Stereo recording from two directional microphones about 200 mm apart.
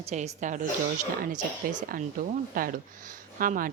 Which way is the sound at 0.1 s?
35° right (ahead or behind).